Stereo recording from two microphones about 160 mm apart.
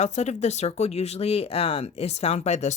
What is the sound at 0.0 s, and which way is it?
Speech, 45° left (ahead or behind).